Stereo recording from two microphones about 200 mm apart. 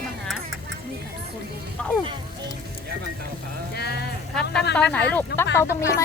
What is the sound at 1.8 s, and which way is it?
Speech, 5° left (ahead or behind).